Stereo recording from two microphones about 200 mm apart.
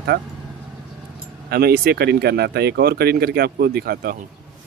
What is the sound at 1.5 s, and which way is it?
Speech, 50° right (ahead or behind).